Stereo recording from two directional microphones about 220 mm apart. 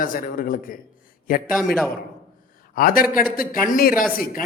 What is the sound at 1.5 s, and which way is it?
Speech, centre (ahead or behind).